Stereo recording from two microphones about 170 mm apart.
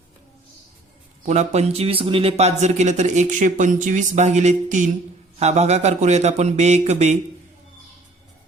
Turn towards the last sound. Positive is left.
turn(degrees=-40)  # may be behind; listen again after turning